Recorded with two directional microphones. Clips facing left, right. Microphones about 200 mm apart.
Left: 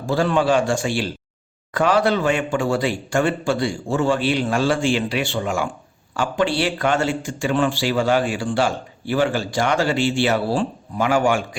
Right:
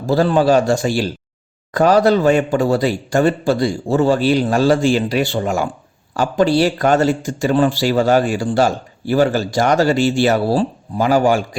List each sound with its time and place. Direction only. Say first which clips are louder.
0.0 s speech: right 5 dB; 35° right (ahead or behind)